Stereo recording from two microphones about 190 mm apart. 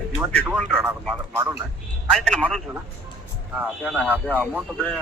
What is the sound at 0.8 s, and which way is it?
Speech, 10° right (ahead or behind).